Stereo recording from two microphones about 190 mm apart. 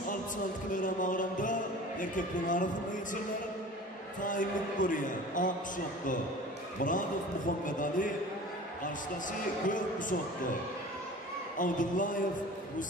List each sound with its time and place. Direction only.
0.7 s music: 45° left (ahead or behind)
4.2 s a man's voice: 45° left (ahead or behind)
6.8 s a man's voice: 45° left (ahead or behind)
9.7 s a man's voice: 45° left (ahead or behind)
11.5 s a man's voice: 45° left (ahead or behind)